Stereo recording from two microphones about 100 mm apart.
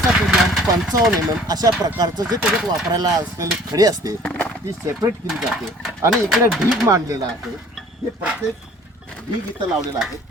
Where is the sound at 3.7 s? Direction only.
40° right (ahead or behind).